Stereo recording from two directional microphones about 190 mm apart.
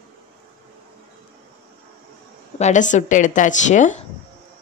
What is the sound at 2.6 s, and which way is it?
Speech, 40° left (ahead or behind).